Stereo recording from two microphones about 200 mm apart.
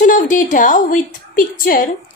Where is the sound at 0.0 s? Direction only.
40° left (ahead or behind).